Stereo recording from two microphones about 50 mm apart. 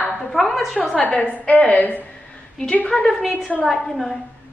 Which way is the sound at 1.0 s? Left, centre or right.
Left.